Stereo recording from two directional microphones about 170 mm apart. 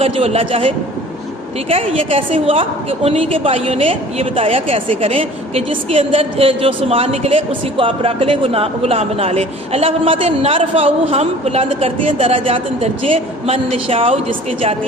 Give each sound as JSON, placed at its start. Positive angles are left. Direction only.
{"t": 0.0, "sound": "a woman's voice", "side_deg": -35}
{"t": 1.7, "sound": "a woman's voice", "side_deg": -35}